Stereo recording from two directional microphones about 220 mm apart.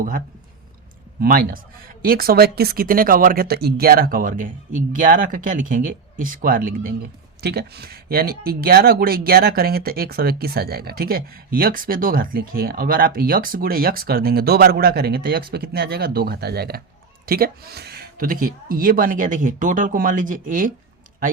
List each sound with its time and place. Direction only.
1.2 s speech: 40° right (ahead or behind)